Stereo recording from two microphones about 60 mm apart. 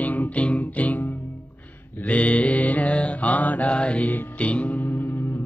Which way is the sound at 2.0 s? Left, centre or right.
Left.